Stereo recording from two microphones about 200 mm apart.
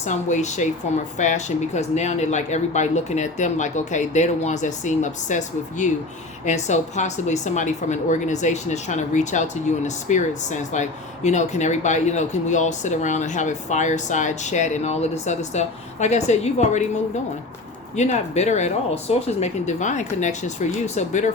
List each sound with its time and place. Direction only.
0.0 s a woman's voice: 35° left (ahead or behind)
17.9 s a woman's voice: 35° left (ahead or behind)